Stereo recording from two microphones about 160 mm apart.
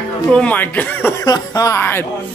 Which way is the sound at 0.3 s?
10° left (ahead or behind).